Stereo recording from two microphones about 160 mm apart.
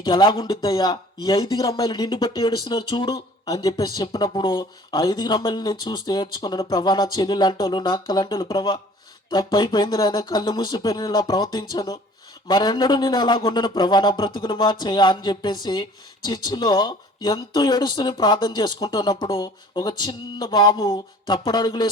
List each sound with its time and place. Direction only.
0.0 s speech: 25° left (ahead or behind)